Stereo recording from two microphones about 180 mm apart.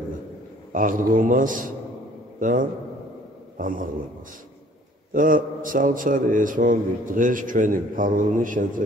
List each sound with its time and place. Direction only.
0.7 s a man's voice: 50° right (ahead or behind)
5.1 s a man's voice: 50° right (ahead or behind)